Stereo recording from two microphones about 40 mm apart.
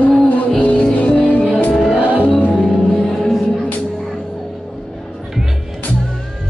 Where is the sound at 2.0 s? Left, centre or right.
Right.